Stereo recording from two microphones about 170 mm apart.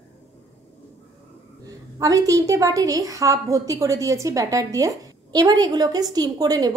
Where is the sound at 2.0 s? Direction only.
20° right (ahead or behind).